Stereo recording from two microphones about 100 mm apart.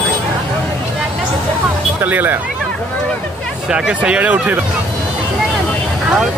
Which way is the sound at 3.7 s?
10° right (ahead or behind).